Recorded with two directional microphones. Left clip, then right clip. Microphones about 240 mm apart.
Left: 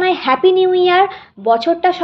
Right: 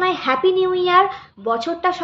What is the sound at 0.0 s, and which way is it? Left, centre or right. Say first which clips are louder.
Speech: left 5 dB; centre.